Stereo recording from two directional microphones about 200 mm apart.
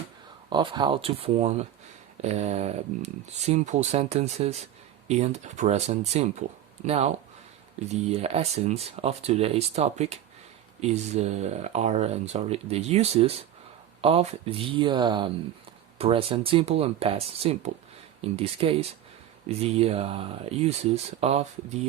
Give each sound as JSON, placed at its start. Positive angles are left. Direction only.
{"t": 0.5, "sound": "speech", "side_deg": -25}
{"t": 8.1, "sound": "speech", "side_deg": -30}